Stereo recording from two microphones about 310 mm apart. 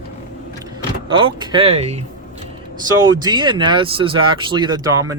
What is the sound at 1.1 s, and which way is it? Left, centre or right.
Speech, centre.